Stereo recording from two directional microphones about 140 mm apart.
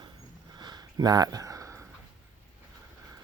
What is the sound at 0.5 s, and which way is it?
Sniff, 30° right (ahead or behind).